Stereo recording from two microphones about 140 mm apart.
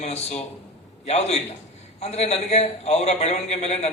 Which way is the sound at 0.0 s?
50° left (ahead or behind).